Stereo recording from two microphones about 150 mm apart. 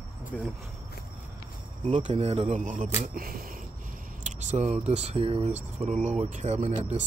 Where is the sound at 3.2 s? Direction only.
75° right (ahead or behind).